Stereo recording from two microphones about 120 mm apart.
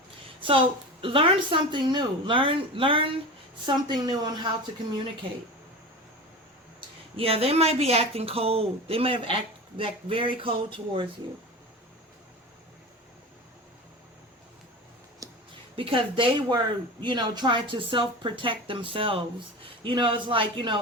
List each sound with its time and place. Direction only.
1.0 s speech: 45° right (ahead or behind)
3.9 s speech: 35° right (ahead or behind)
7.2 s speech: 55° right (ahead or behind)
15.2 s a sound: 30° right (ahead or behind)
15.7 s speech: 45° right (ahead or behind)